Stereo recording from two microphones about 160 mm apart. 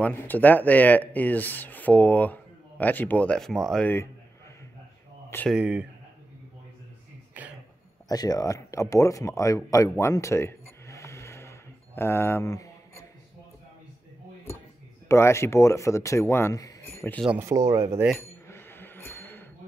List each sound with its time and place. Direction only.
0.0 s speech: 10° left (ahead or behind)
5.5 s speech: 10° right (ahead or behind)
8.1 s speech: 25° left (ahead or behind)
15.0 s speech: 15° left (ahead or behind)
17.4 s speech: 20° right (ahead or behind)
18.5 s a sound: 15° left (ahead or behind)